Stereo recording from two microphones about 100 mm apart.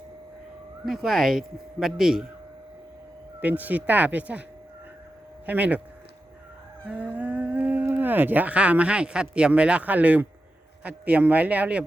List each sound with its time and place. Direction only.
0.9 s speech: centre (ahead or behind)
3.4 s speech: 15° right (ahead or behind)
5.5 s speech: 15° right (ahead or behind)
6.8 s speech: 15° right (ahead or behind)